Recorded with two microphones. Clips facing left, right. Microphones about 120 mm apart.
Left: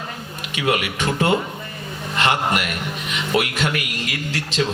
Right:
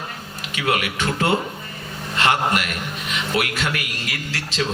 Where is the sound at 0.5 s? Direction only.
20° left (ahead or behind).